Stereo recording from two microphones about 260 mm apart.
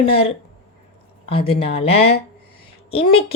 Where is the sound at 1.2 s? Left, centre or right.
Left.